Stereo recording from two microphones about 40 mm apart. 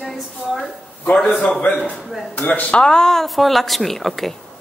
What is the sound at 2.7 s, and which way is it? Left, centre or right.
A woman's voice, centre.